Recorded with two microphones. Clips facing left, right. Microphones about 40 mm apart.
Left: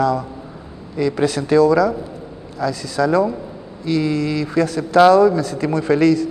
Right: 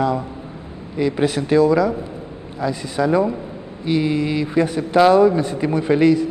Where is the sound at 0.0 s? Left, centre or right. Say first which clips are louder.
Left 2 dB; right.